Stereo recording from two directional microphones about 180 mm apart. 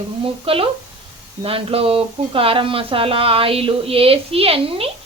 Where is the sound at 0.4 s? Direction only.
30° right (ahead or behind).